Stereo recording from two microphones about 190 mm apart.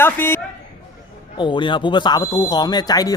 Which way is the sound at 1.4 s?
25° left (ahead or behind).